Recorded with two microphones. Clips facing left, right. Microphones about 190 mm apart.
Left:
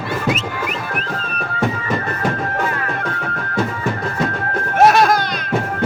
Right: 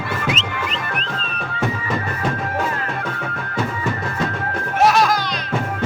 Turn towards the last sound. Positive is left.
turn(degrees=55)  # may be behind; listen again after turning